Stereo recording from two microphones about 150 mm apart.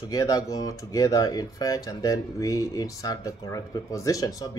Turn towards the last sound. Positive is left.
turn(degrees=25)  # may be behind; listen again after turning